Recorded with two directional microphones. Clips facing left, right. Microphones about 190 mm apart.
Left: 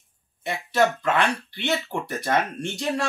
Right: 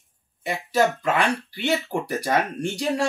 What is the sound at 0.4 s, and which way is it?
Speech, 10° right (ahead or behind).